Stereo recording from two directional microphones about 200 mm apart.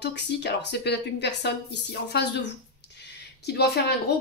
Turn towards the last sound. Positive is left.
turn(degrees=55)  # may be behind; listen again after turning